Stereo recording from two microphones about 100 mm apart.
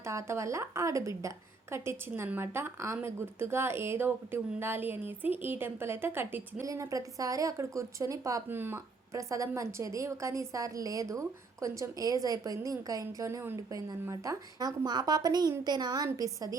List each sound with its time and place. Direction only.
0.0 s a woman's voice: 30° right (ahead or behind)
6.7 s a woman's voice: 35° right (ahead or behind)
8.4 s a woman's voice: 20° right (ahead or behind)
9.1 s a woman's voice: 35° right (ahead or behind)